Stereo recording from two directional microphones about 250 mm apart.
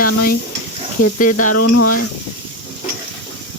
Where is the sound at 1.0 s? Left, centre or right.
Left.